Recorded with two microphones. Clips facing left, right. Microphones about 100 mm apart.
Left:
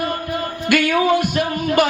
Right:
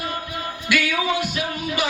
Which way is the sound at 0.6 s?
50° left (ahead or behind).